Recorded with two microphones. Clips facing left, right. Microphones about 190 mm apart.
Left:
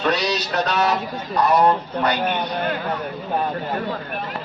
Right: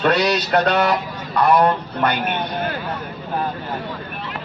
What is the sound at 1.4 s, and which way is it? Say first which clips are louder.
Speech: right 1 dB; 60° right (ahead or behind).